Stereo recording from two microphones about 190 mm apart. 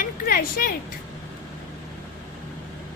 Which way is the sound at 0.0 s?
50° left (ahead or behind).